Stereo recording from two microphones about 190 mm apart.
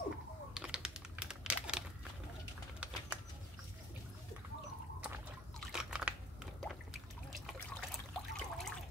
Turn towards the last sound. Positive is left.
turn(degrees=0)  # may be behind; listen again after turning